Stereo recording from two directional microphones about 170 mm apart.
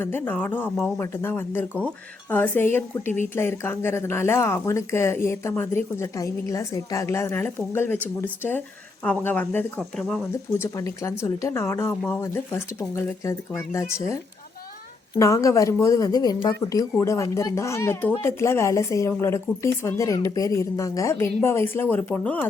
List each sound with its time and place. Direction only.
0.0 s speech: 10° left (ahead or behind)
9.0 s speech: 10° left (ahead or behind)
10.6 s a woman's voice: 20° left (ahead or behind)